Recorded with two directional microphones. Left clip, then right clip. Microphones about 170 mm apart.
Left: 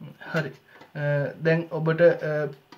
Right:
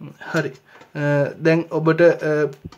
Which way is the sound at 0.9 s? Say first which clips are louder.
Right 7 dB; 40° right (ahead or behind).